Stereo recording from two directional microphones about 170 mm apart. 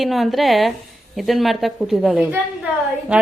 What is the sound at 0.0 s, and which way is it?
A woman's voice, centre (ahead or behind).